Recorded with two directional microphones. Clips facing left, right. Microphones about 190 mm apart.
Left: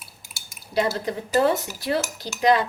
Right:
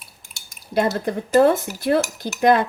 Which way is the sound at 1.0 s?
50° right (ahead or behind).